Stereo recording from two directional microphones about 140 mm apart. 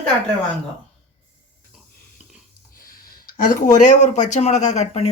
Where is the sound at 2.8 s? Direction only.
90° left.